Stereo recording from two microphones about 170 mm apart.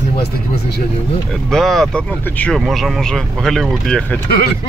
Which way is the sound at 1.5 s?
Centre (ahead or behind).